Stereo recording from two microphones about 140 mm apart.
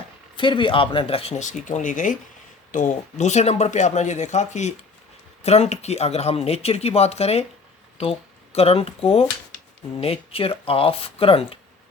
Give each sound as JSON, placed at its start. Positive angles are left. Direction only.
{"t": 0.3, "sound": "speech", "side_deg": 35}